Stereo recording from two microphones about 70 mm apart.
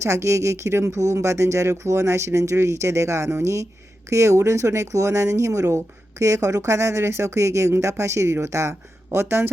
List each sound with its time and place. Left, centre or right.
0.0 s speech: right